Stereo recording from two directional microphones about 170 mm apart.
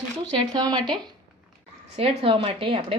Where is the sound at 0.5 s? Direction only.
25° right (ahead or behind).